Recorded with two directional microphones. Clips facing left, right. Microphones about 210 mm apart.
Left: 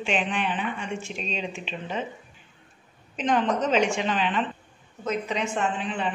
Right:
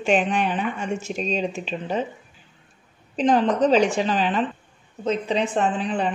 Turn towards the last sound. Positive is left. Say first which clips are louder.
# right 5 dB
turn(degrees=-40)  # may be behind; listen again after turning